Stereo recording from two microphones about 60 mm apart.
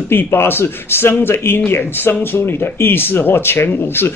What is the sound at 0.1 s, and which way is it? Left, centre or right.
Speech, left.